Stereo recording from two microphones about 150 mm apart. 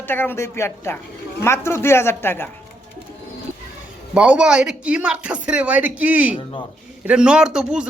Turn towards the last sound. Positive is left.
turn(degrees=-5)  # may be behind; listen again after turning